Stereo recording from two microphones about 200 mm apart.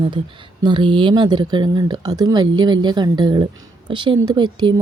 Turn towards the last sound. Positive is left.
turn(degrees=-20)  # may be behind; listen again after turning